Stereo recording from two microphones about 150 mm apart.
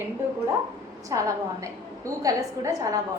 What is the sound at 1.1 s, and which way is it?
A woman's voice, 25° right (ahead or behind).